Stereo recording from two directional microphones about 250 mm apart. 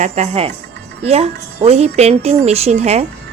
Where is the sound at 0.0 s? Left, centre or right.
Right.